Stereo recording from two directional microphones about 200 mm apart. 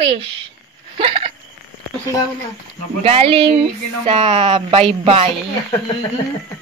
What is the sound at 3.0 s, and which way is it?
Speech, 30° right (ahead or behind).